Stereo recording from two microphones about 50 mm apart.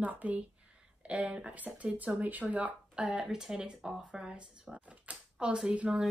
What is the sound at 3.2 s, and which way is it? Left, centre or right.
Speech, centre.